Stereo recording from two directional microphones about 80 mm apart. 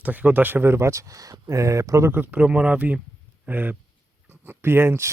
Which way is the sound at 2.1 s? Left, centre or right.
Right.